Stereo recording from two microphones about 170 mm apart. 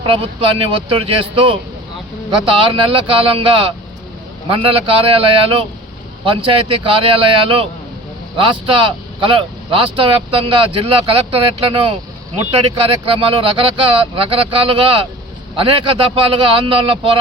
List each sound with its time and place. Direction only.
0.0 s speech: 30° right (ahead or behind)